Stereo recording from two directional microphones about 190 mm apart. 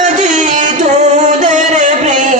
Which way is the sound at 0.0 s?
40° right (ahead or behind).